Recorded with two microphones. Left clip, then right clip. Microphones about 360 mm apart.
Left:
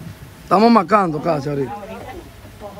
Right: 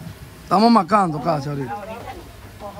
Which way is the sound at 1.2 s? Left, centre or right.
Centre.